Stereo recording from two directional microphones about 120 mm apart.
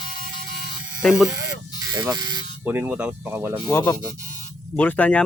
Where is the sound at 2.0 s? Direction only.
35° right (ahead or behind).